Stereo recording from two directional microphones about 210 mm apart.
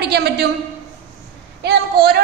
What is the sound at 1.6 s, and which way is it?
Speech, 50° right (ahead or behind).